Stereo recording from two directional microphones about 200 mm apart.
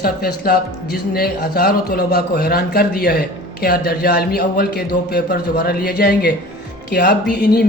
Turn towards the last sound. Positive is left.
turn(degrees=55)  # may be behind; listen again after turning